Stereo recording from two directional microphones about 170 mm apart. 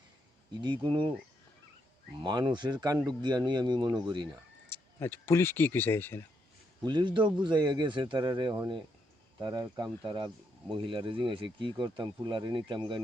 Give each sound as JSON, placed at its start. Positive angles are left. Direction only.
{"t": 0.5, "sound": "speech", "side_deg": -25}
{"t": 2.2, "sound": "speech", "side_deg": -25}
{"t": 4.7, "sound": "speech", "side_deg": 10}
{"t": 6.8, "sound": "speech", "side_deg": -25}